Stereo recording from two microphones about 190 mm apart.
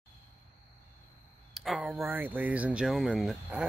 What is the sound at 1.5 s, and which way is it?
Speech, centre (ahead or behind).